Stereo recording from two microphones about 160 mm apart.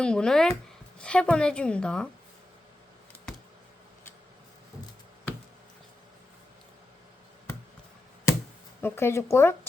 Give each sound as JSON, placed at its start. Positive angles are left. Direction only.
{"t": 0.0, "sound": "a woman's voice", "side_deg": 5}
{"t": 8.8, "sound": "a woman's voice", "side_deg": 15}